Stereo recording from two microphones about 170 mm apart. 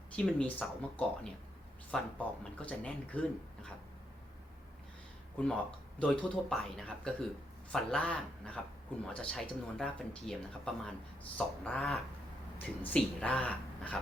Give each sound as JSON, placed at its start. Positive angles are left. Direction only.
{"t": 0.2, "sound": "speech", "side_deg": 5}
{"t": 5.4, "sound": "speech", "side_deg": 5}